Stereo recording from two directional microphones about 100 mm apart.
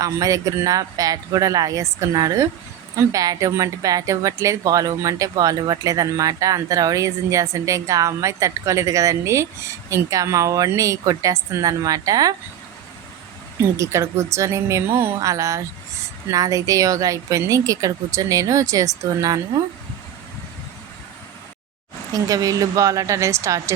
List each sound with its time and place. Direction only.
0.0 s speech: 35° right (ahead or behind)
13.6 s speech: 30° right (ahead or behind)
22.1 s speech: 35° right (ahead or behind)